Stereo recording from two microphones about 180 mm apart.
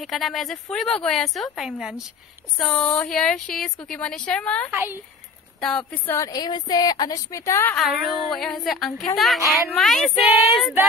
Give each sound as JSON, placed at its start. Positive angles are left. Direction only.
{"t": 0.0, "sound": "speech", "side_deg": 0}
{"t": 4.7, "sound": "speech", "side_deg": -10}
{"t": 5.6, "sound": "speech", "side_deg": 5}
{"t": 6.1, "sound": "a woman's voice", "side_deg": 20}
{"t": 7.7, "sound": "speech", "side_deg": 0}